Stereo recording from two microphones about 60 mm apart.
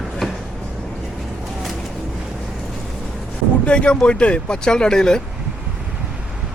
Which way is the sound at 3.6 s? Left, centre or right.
Centre.